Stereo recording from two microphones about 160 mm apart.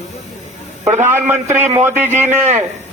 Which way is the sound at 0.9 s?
15° right (ahead or behind).